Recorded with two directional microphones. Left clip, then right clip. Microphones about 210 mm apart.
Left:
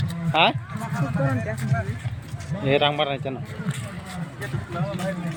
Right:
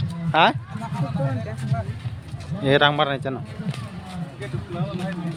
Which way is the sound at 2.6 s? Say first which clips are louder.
Right 3 dB; 30° right (ahead or behind).